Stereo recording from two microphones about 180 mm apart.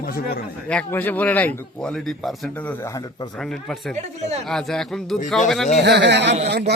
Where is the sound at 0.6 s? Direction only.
10° left (ahead or behind).